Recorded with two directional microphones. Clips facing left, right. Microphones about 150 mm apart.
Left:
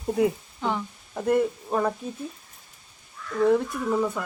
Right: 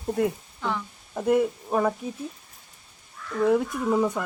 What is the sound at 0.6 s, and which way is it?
Speech, 20° left (ahead or behind).